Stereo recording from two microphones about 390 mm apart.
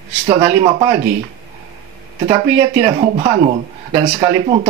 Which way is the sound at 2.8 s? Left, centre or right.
Centre.